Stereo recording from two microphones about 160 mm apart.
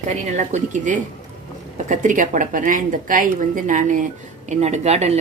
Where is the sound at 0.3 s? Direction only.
50° right (ahead or behind).